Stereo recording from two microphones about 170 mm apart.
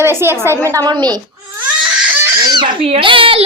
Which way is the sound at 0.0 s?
15° right (ahead or behind).